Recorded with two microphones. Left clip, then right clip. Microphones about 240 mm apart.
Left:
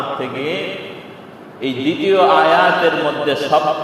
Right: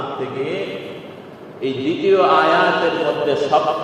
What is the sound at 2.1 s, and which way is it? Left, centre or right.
Mantra, left.